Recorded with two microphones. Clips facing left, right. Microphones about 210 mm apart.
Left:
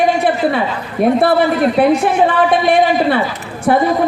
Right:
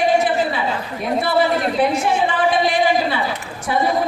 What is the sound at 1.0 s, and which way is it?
A woman's voice, 60° left (ahead or behind).